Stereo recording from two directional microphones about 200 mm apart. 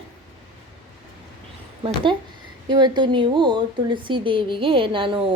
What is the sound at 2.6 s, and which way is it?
A woman's voice, 20° right (ahead or behind).